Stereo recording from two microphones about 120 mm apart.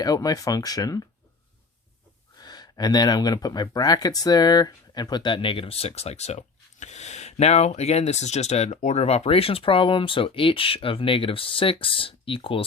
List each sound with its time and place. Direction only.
0.0 s speech: 30° left (ahead or behind)
2.4 s speech: 35° left (ahead or behind)